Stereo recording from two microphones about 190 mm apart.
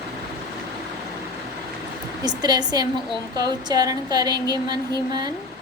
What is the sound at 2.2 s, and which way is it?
A woman's voice, 20° right (ahead or behind).